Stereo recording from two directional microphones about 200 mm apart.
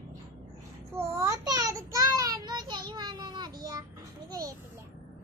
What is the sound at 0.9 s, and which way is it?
Child singing, 15° right (ahead or behind).